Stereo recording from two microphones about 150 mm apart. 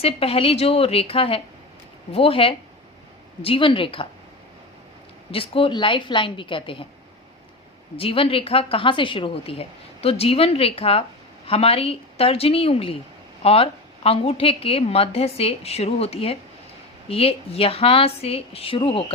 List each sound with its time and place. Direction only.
0.0 s a woman's voice: 40° left (ahead or behind)
5.3 s a woman's voice: 35° left (ahead or behind)
7.9 s a woman's voice: 40° left (ahead or behind)